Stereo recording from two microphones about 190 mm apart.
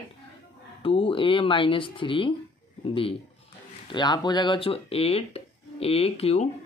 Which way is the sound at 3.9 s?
25° left (ahead or behind).